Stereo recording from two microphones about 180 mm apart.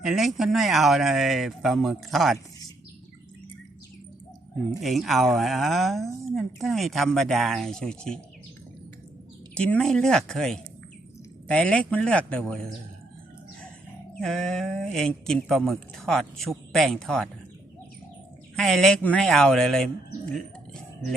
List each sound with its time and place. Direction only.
0.0 s speech: centre (ahead or behind)
4.8 s speech: centre (ahead or behind)
9.6 s a man's voice: 5° left (ahead or behind)
14.2 s speech: centre (ahead or behind)
18.5 s speech: 5° left (ahead or behind)